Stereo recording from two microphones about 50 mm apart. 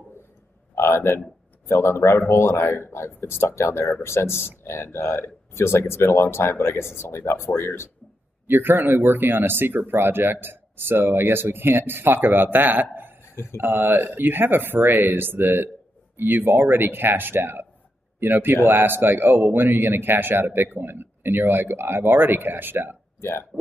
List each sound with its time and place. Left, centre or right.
0.7 s speech: left
8.5 s speech: right
12.9 s a sound: right
13.6 s speech: right
23.5 s speech: centre